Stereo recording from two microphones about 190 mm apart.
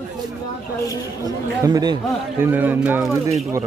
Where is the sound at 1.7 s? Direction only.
20° right (ahead or behind).